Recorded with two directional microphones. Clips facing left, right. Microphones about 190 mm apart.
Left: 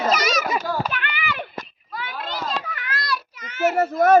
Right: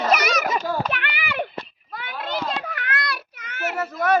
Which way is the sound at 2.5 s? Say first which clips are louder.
Right 1 dB; 60° right (ahead or behind).